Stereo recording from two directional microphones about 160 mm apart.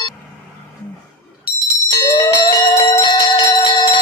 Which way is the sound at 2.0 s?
25° left (ahead or behind).